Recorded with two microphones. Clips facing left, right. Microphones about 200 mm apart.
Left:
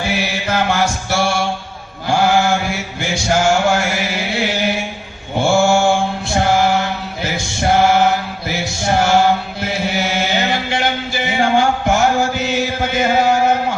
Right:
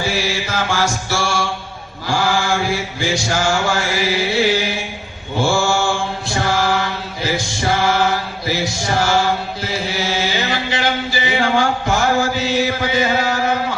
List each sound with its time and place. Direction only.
0.1 s chant: 60° left (ahead or behind)
1.2 s mantra: 55° left (ahead or behind)
7.2 s music: 55° left (ahead or behind)
9.6 s chant: 55° left (ahead or behind)